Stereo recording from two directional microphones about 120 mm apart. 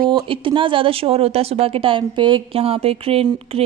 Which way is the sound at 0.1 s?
45° right (ahead or behind).